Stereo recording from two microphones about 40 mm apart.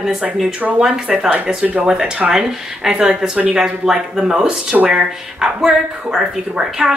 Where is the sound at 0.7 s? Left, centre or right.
Right.